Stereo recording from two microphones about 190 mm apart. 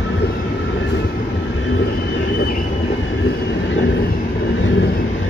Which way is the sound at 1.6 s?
80° left.